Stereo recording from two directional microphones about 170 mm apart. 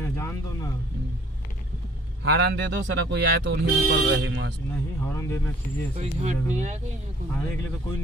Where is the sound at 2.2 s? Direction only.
90° right.